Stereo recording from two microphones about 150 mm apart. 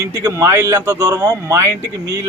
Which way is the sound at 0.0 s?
25° right (ahead or behind).